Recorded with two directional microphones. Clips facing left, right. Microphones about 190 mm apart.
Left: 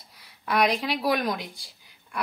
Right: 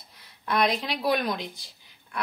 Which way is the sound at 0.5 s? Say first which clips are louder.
Left 1 dB; 10° left (ahead or behind).